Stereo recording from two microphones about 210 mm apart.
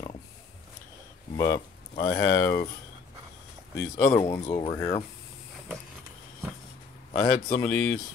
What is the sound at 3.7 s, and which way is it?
Speech, 10° left (ahead or behind).